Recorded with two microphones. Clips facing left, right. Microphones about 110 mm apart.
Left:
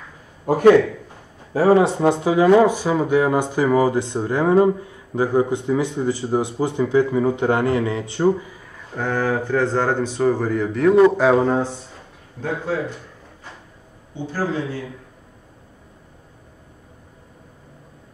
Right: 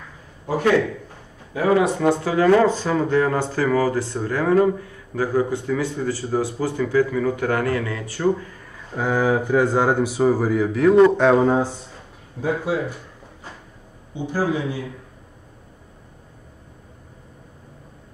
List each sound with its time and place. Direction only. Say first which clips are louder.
0.5 s a man's voice: left 7 dB; 50° left (ahead or behind)
1.5 s speech: left 3 dB; 30° left (ahead or behind)
8.5 s a sound: left 1 dB; 5° left (ahead or behind)
8.9 s speech: right 2 dB; 10° right (ahead or behind)
14.1 s speech: right 1 dB; 15° right (ahead or behind)